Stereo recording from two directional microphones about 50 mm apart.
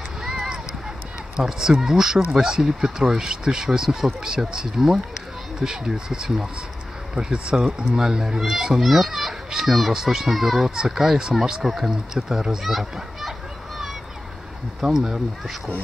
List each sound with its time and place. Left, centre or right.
0.2 s a sound: centre
1.4 s speech: centre
8.4 s a child's voice: centre
14.8 s speech: centre